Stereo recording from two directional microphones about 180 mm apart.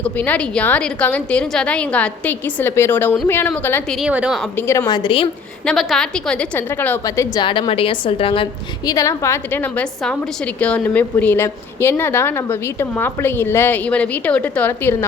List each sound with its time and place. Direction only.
0.0 s a woman's voice: 10° left (ahead or behind)
4.0 s a woman's voice: 5° right (ahead or behind)
4.5 s a woman's voice: 10° left (ahead or behind); by 5.3 s 25° left (ahead or behind)
5.6 s a woman's voice: centre (ahead or behind); by 8.4 s 30° left (ahead or behind)
8.9 s a woman's voice: 20° left (ahead or behind)